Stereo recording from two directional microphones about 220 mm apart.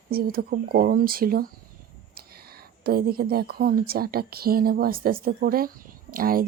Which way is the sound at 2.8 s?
45° right (ahead or behind).